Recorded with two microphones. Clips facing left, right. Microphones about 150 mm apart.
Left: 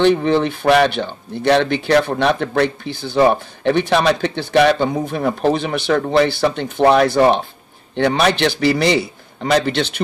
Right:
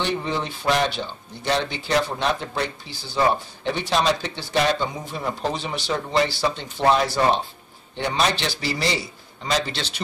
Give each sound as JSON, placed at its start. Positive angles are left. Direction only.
{"t": 0.0, "sound": "speech", "side_deg": 65}